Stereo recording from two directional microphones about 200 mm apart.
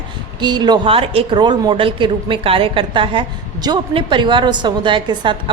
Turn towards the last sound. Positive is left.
turn(degrees=-25)  # may be behind; listen again after turning